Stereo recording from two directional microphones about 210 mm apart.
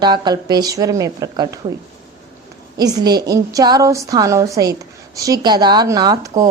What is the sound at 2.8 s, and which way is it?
Speech, 20° right (ahead or behind).